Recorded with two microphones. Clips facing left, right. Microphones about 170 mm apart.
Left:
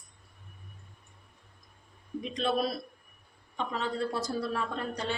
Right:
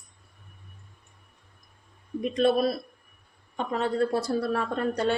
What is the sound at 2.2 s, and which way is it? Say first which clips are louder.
Speech: right 7 dB; 55° right (ahead or behind).